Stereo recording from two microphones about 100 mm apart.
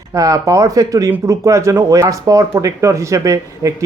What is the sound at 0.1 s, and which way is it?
A man's voice, 35° right (ahead or behind).